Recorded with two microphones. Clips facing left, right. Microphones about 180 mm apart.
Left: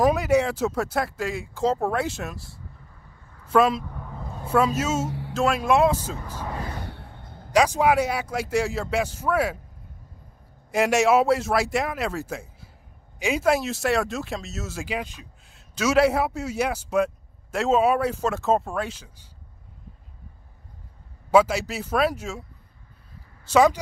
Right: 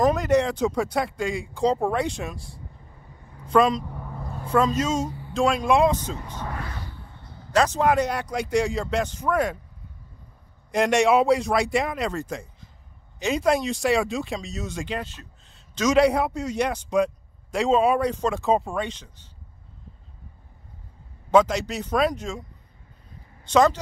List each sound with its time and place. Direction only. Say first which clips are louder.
0.0 s speech: even; 10° left (ahead or behind)
3.8 s a sound: right 1 dB; 10° right (ahead or behind)
4.5 s speech: even; 5° left (ahead or behind)
5.0 s music: left 1 dB; 85° left
5.3 s speech: right 1 dB; 5° left (ahead or behind)
6.8 s a sound: left 3 dB; 65° left (ahead or behind)
7.5 s speech: left 1 dB; 10° left (ahead or behind)
10.7 s speech: even; 5° left (ahead or behind)
21.3 s speech: even; 5° left (ahead or behind)
23.4 s speech: left 1 dB; 10° left (ahead or behind)